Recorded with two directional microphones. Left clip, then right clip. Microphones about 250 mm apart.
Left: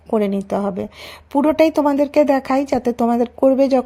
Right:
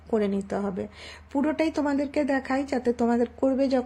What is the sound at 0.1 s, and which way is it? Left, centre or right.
A woman's voice, left.